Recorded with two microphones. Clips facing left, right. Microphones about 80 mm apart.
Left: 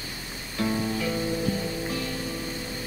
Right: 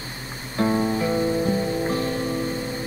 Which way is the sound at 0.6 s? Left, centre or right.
Right.